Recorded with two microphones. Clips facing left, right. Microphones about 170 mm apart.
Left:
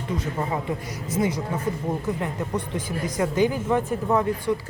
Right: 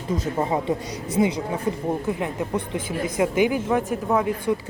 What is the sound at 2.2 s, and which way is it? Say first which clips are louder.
Speech: right 2 dB; 15° right (ahead or behind).